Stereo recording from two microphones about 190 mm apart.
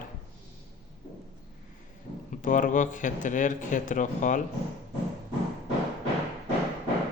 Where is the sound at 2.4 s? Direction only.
40° left (ahead or behind).